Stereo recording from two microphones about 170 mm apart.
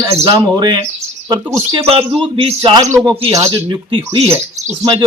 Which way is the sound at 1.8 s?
35° right (ahead or behind).